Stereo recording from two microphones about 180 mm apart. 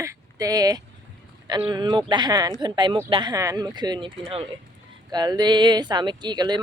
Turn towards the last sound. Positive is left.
turn(degrees=-25)  # may be behind; listen again after turning